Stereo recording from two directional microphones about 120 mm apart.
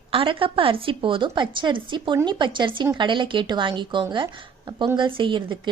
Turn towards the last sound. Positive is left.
turn(degrees=-45)  # may be behind; listen again after turning